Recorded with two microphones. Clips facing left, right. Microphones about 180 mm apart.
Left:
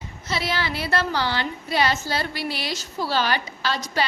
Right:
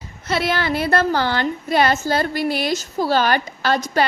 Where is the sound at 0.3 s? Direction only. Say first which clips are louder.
Right 6 dB; 55° right (ahead or behind).